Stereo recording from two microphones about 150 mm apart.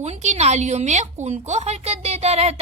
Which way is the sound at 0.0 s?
45° right (ahead or behind).